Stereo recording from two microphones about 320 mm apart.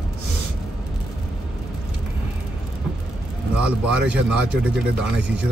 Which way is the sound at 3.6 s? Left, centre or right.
Centre.